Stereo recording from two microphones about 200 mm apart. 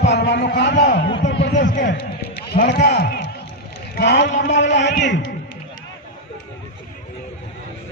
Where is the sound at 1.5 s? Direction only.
40° left (ahead or behind).